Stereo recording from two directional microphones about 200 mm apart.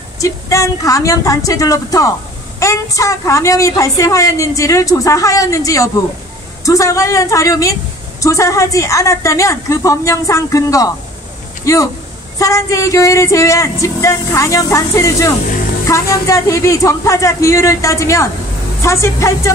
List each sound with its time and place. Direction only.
0.2 s a woman's voice: 15° left (ahead or behind)